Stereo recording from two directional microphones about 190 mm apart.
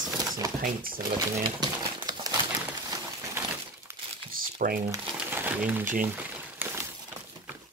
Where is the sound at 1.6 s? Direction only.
20° right (ahead or behind).